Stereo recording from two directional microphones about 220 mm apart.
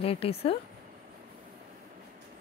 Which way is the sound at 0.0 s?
25° left (ahead or behind).